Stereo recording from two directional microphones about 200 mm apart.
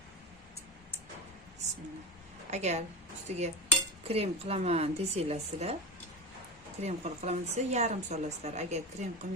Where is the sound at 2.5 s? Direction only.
35° right (ahead or behind).